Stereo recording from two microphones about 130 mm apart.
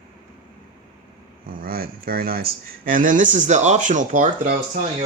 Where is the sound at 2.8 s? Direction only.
90° right.